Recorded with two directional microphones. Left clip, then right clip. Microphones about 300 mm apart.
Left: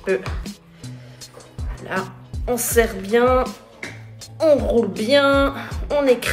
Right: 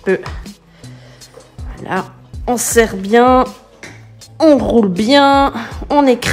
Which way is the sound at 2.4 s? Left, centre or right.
Right.